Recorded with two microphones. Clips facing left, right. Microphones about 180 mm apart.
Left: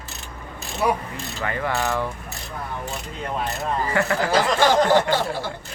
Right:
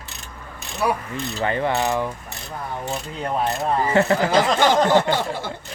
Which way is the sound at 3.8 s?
25° right (ahead or behind).